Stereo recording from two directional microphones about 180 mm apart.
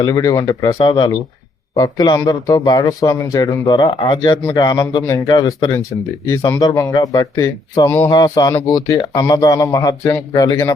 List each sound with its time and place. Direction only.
0.0 s speech: 20° left (ahead or behind)